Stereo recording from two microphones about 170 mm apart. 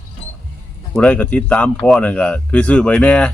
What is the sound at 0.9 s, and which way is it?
Speech, 10° left (ahead or behind).